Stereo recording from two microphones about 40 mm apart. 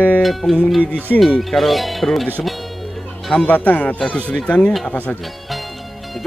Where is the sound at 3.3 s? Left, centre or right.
Left.